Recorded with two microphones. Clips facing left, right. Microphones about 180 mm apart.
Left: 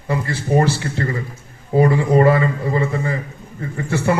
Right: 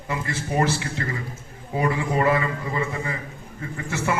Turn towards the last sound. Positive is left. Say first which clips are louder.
# left 7 dB
turn(degrees=35)  # may be behind; listen again after turning